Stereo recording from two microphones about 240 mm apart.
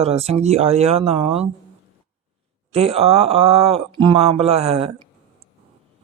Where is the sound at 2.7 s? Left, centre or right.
Right.